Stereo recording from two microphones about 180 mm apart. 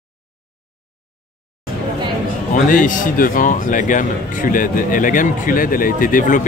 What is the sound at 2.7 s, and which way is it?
A man's voice, 45° left (ahead or behind).